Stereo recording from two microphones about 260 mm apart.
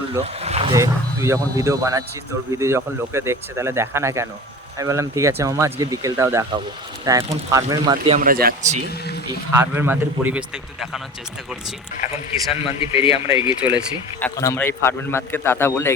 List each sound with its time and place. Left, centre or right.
0.3 s wild animals: right
0.7 s speech: centre
8.2 s speech: right
9.5 s speech: centre
12.5 s a man's voice: left
13.6 s speech: centre
14.2 s a man's voice: centre